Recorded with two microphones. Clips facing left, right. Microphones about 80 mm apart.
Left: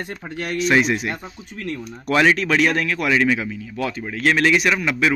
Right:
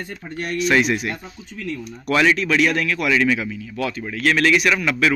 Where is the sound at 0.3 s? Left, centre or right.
Left.